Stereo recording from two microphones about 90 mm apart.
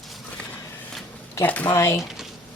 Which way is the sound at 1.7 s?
30° left (ahead or behind).